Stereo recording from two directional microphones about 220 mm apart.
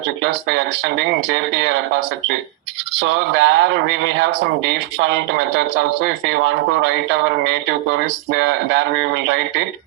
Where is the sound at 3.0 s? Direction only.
55° right (ahead or behind).